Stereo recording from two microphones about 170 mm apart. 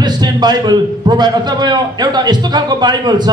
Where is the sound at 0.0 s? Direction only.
25° right (ahead or behind).